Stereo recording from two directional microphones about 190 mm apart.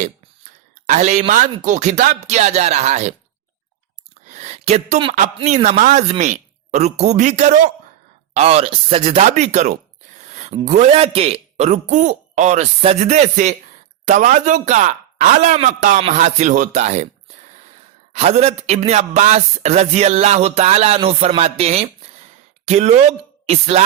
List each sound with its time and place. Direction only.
0.9 s a man's voice: 40° right (ahead or behind)
4.3 s a sound: 35° right (ahead or behind)
5.1 s a man's voice: 40° right (ahead or behind)
18.1 s a man's voice: 35° right (ahead or behind)